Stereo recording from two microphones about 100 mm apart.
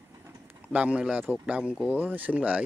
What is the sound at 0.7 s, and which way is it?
Speech, 15° right (ahead or behind).